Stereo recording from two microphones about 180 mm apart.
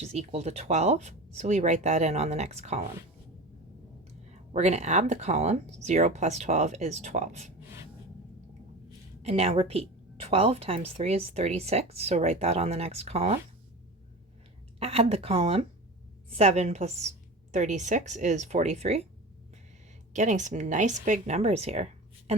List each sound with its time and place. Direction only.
0.0 s speech: 35° right (ahead or behind)
4.3 s speech: 40° right (ahead or behind)
9.2 s speech: 35° right (ahead or behind)
14.8 s speech: 35° right (ahead or behind)
20.1 s speech: 45° right (ahead or behind)